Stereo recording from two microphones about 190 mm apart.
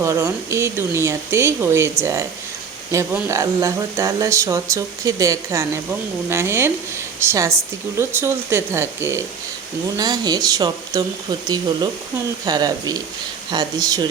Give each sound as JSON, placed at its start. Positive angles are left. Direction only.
{"t": 0.0, "sound": "speech", "side_deg": -15}
{"t": 2.9, "sound": "speech", "side_deg": -15}